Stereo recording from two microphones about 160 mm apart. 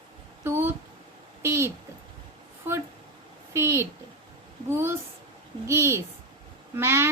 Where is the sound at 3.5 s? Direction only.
15° right (ahead or behind).